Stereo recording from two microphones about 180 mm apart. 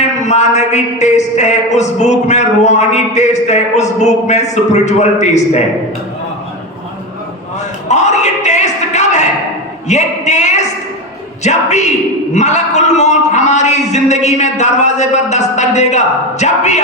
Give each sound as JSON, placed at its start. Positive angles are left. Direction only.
{"t": 0.0, "sound": "speech", "side_deg": 40}
{"t": 7.9, "sound": "speech", "side_deg": 40}